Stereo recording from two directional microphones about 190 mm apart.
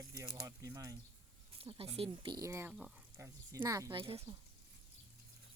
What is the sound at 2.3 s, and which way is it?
Speech, 15° right (ahead or behind).